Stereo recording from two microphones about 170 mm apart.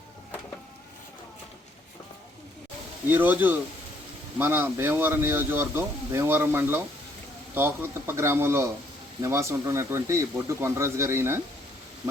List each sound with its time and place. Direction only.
3.1 s a man's voice: 10° right (ahead or behind)